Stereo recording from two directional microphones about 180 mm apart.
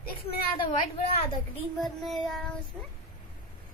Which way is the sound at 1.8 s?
Centre (ahead or behind).